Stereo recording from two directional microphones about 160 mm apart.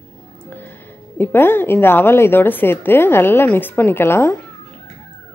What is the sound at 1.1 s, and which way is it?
A woman's voice, 15° left (ahead or behind).